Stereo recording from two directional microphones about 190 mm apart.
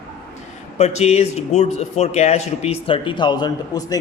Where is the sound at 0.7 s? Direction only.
35° left (ahead or behind).